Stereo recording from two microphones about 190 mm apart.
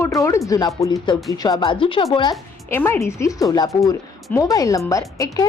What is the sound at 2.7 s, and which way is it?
A woman's voice, 10° left (ahead or behind).